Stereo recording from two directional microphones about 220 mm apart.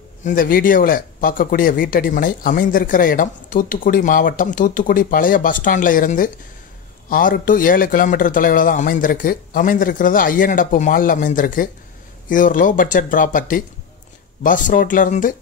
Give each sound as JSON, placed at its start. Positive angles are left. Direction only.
{"t": 0.2, "sound": "speech", "side_deg": 40}